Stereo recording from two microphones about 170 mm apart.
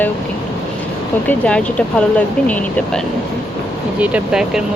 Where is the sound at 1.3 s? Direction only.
5° left (ahead or behind).